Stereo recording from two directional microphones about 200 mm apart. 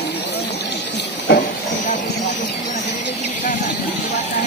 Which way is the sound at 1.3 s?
50° left (ahead or behind).